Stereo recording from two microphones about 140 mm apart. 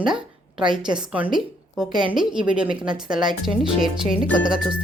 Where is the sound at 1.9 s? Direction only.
30° right (ahead or behind).